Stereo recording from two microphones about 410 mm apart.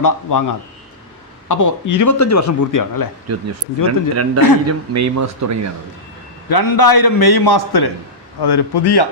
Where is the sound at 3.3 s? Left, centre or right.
Right.